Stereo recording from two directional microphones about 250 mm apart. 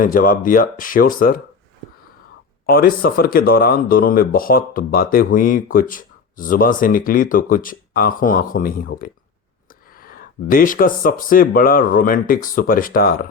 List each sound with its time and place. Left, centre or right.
0.0 s speech: left
2.6 s speech: left